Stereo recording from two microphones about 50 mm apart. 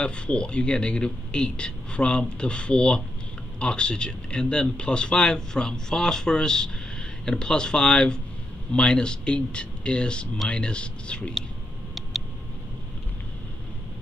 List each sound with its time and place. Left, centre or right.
0.0 s a man's voice: left